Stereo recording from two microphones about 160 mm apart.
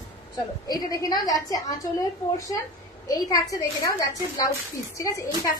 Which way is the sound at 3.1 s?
20° left (ahead or behind).